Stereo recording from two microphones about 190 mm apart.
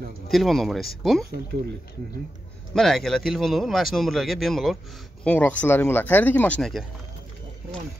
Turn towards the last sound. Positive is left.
turn(degrees=0)  # may be behind; listen again after turning